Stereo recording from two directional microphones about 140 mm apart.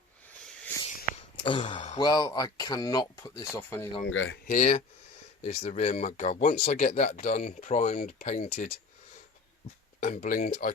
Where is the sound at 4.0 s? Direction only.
70° left (ahead or behind).